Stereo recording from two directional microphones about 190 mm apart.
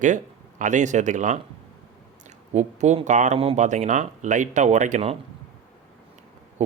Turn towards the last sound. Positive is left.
turn(degrees=-35)  # may be behind; listen again after turning